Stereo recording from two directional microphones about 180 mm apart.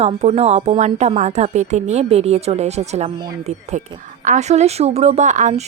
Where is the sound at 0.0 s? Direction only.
35° right (ahead or behind).